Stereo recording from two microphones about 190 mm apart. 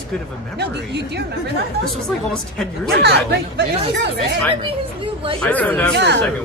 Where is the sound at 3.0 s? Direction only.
60° right (ahead or behind).